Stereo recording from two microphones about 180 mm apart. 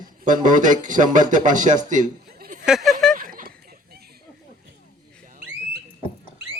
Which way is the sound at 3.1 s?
50° right (ahead or behind).